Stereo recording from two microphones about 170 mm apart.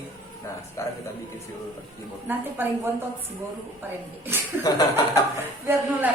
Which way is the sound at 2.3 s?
10° right (ahead or behind).